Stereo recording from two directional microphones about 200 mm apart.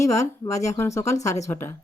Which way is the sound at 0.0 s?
15° left (ahead or behind).